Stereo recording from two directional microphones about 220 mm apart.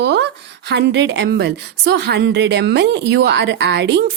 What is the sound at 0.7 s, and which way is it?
A woman's voice, 50° right (ahead or behind).